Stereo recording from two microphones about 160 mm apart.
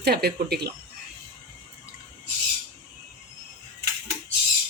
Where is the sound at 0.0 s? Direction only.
80° right.